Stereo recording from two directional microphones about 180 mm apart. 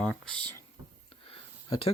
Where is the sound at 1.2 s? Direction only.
30° left (ahead or behind).